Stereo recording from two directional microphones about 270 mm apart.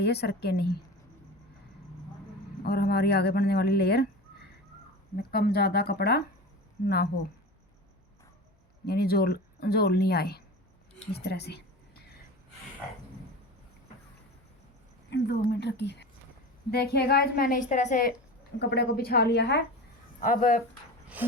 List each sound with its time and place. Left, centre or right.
0.0 s speech: left
2.6 s speech: left
8.9 s speech: left
11.1 s a sound: left
15.1 s speech: left
18.6 s speech: left
21.2 s a sound: centre